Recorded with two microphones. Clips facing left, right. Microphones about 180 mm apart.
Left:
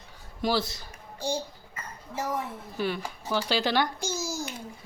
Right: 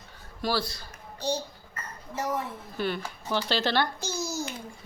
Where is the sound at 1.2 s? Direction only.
10° left (ahead or behind).